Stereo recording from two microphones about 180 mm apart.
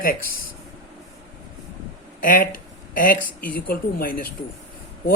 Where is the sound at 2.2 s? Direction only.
50° left (ahead or behind).